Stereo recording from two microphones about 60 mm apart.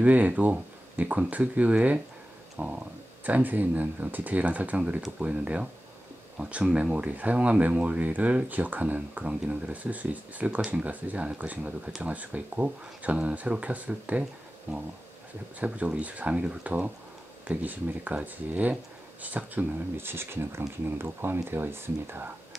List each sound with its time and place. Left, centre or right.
0.0 s speech: right
20.1 s speech: right